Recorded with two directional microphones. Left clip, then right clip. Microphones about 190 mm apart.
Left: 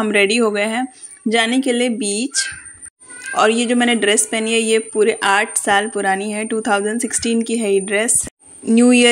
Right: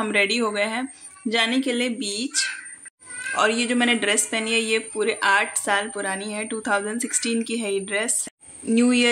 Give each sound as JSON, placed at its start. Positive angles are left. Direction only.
{"t": 0.0, "sound": "speech", "side_deg": 30}